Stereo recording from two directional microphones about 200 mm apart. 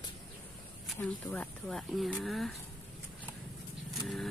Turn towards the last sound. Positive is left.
turn(degrees=0)  # may be behind; listen again after turning